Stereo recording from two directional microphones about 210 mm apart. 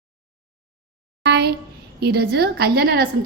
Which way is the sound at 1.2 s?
50° right (ahead or behind).